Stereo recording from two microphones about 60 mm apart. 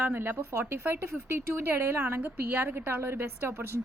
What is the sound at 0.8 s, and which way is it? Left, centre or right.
A woman's voice, right.